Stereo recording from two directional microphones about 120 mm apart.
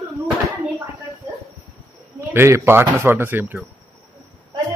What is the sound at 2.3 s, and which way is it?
Speech, 20° right (ahead or behind).